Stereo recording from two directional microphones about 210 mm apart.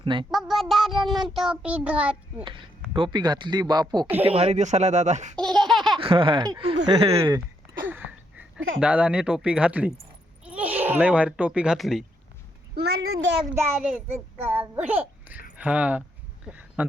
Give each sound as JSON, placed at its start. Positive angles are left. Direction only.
{"t": 0.0, "sound": "speech", "side_deg": -25}
{"t": 0.3, "sound": "child singing", "side_deg": 0}
{"t": 2.4, "sound": "speech", "side_deg": -25}
{"t": 5.4, "sound": "laughter", "side_deg": 0}
{"t": 6.0, "sound": "speech", "side_deg": -25}
{"t": 7.9, "sound": "a sound", "side_deg": -10}
{"t": 8.8, "sound": "child singing", "side_deg": -5}
{"t": 10.4, "sound": "speech", "side_deg": -5}
{"t": 12.7, "sound": "a sound", "side_deg": -50}
{"t": 13.5, "sound": "a child's voice", "side_deg": -10}
{"t": 16.5, "sound": "a sound", "side_deg": -5}